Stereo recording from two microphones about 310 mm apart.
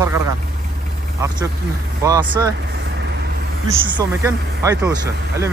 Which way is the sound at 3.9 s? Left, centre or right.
Centre.